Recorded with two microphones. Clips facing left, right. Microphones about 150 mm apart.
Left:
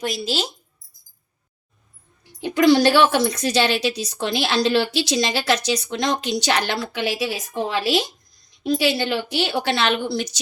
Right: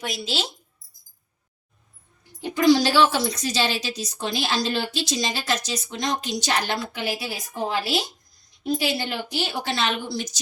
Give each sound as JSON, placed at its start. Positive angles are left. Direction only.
{"t": 2.4, "sound": "speech", "side_deg": 65}